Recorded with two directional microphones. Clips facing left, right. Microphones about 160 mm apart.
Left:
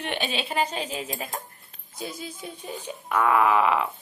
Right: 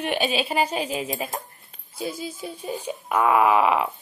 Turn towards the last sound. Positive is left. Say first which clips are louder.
# right 2 dB
turn(degrees=-15)  # may be behind; listen again after turning